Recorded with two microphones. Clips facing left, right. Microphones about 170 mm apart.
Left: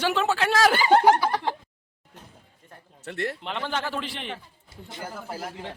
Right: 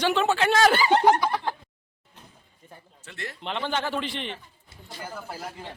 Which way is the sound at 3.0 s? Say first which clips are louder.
Left 9 dB; 60° left (ahead or behind).